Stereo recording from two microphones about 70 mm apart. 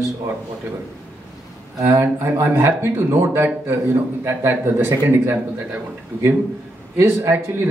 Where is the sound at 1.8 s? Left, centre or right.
Right.